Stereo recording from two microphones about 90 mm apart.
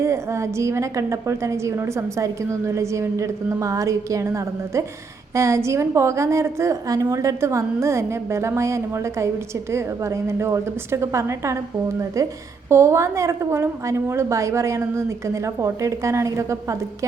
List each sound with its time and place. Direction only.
0.0 s a woman's voice: 30° right (ahead or behind)